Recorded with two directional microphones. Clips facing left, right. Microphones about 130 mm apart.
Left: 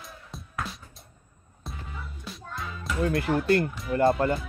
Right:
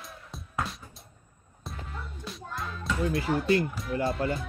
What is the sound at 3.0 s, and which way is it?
Speech, 60° left (ahead or behind).